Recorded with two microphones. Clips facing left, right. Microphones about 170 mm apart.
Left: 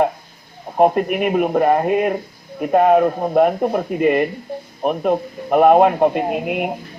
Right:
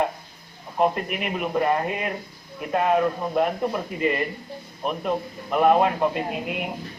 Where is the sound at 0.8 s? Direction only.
50° left (ahead or behind).